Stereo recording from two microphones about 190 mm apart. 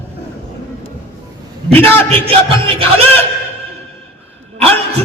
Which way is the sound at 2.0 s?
30° right (ahead or behind).